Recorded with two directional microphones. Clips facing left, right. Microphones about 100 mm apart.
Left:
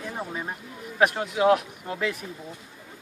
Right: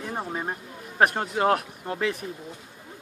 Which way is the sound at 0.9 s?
40° right (ahead or behind).